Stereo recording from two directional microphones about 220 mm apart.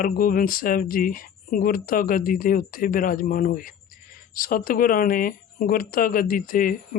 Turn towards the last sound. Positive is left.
turn(degrees=40)  # may be behind; listen again after turning